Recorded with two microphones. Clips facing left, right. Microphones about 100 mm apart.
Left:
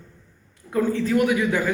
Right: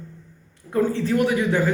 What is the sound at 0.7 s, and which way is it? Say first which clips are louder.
Speech: even; 30° right (ahead or behind).